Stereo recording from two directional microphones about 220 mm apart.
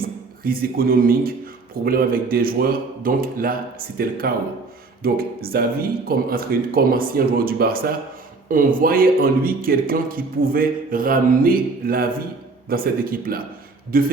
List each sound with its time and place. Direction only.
0.0 s speech: 40° right (ahead or behind)